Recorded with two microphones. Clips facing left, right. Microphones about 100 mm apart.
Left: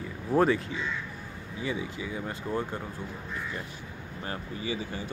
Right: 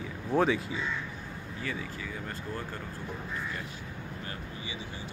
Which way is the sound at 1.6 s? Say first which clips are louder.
Left 5 dB; 15° left (ahead or behind).